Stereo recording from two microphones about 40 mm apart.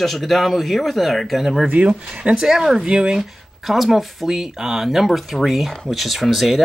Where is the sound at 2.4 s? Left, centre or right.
Centre.